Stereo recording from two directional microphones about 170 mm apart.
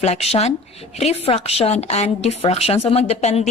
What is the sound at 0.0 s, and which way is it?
A woman's voice, 40° left (ahead or behind).